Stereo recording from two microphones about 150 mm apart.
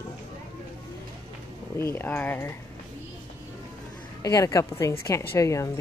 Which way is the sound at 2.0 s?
10° left (ahead or behind).